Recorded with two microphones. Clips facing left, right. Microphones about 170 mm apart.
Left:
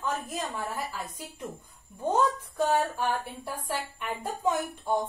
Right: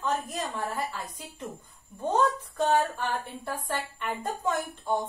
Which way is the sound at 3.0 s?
10° left (ahead or behind).